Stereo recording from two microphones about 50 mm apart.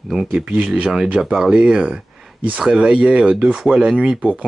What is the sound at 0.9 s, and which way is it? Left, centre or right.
Speech, centre.